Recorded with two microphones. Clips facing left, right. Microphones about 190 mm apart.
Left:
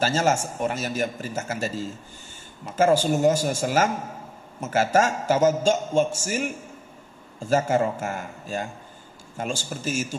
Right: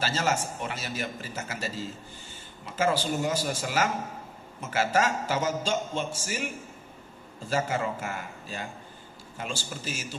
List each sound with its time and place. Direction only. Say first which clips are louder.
0.0 s a man's voice: left 6 dB; 45° left (ahead or behind)